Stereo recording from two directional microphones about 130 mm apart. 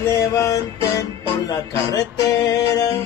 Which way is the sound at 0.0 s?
20° left (ahead or behind).